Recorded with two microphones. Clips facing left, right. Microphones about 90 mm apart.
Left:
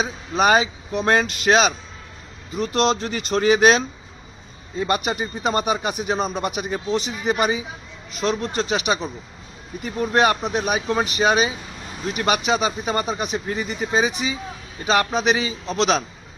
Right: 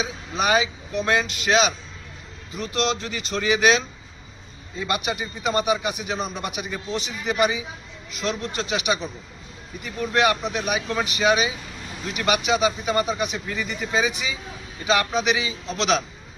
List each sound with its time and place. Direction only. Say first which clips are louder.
0.0 s speech: left 5 dB; 40° left (ahead or behind)